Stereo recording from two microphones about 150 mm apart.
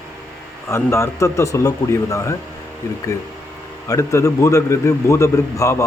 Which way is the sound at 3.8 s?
20° left (ahead or behind).